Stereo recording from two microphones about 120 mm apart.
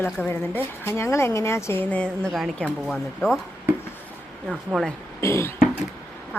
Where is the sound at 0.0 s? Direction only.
15° left (ahead or behind).